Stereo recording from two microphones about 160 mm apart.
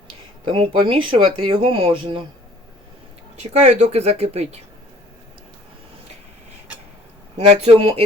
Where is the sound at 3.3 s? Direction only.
45° right (ahead or behind).